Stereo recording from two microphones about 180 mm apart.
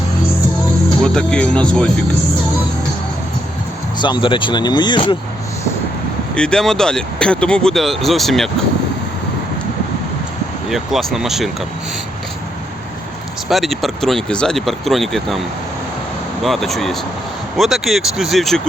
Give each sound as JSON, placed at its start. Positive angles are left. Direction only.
{"t": 0.9, "sound": "speech", "side_deg": 5}
{"t": 3.9, "sound": "speech", "side_deg": 25}
{"t": 6.3, "sound": "speech", "side_deg": 5}
{"t": 10.7, "sound": "speech", "side_deg": 0}
{"t": 13.5, "sound": "speech", "side_deg": 0}
{"t": 16.4, "sound": "speech", "side_deg": 0}